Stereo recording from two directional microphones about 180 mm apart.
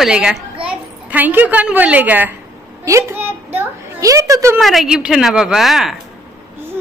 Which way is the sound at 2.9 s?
15° right (ahead or behind).